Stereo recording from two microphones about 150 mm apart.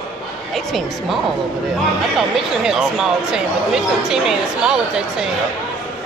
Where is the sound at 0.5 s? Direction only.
Centre (ahead or behind).